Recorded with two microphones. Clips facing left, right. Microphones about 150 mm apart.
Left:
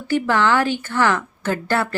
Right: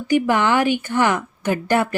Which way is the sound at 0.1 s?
15° right (ahead or behind).